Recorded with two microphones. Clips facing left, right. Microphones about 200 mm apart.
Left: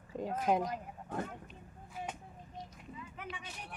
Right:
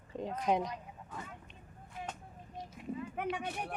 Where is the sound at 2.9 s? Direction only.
55° right (ahead or behind).